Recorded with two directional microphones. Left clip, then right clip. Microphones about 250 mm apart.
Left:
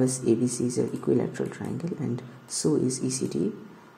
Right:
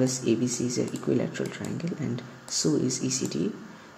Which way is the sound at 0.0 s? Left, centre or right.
Centre.